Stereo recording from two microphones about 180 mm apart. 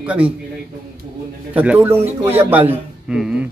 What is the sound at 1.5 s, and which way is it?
A man's voice, 10° right (ahead or behind).